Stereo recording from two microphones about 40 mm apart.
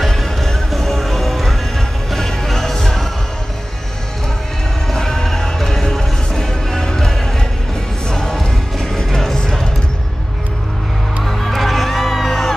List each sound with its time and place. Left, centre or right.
0.0 s music: centre
4.8 s music: centre
11.2 s music: centre